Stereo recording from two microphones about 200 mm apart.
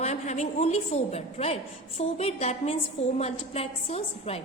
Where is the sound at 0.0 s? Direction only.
35° left (ahead or behind).